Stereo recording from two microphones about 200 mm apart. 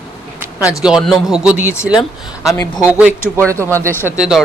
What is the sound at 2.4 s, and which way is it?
Speech, 15° left (ahead or behind).